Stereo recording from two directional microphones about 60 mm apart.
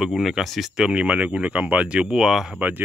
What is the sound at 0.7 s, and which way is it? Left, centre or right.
Speech, centre.